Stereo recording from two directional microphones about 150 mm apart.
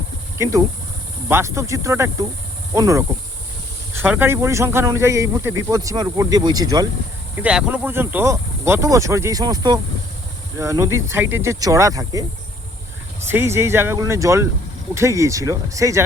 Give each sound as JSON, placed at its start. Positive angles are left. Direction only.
{"t": 0.3, "sound": "speech", "side_deg": -20}
{"t": 4.0, "sound": "speech", "side_deg": -15}
{"t": 7.3, "sound": "speech", "side_deg": -10}
{"t": 13.2, "sound": "speech", "side_deg": -15}